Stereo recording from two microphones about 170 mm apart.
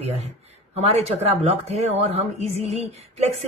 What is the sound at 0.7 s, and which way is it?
Speech, 40° right (ahead or behind).